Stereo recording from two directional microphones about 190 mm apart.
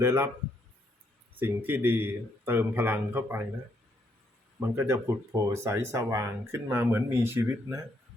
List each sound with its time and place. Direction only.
0.0 s speech: 15° right (ahead or behind)
1.4 s speech: 10° right (ahead or behind)
4.7 s speech: 15° right (ahead or behind)